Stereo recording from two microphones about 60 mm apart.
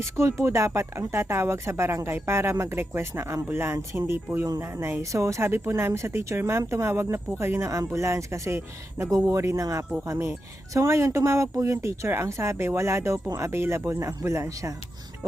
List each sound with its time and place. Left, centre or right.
0.0 s speech: right
5.1 s speech: right
5.5 s speech: right
10.8 s speech: right